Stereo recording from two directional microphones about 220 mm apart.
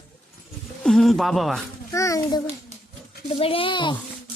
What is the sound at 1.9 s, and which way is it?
Child singing, 15° left (ahead or behind).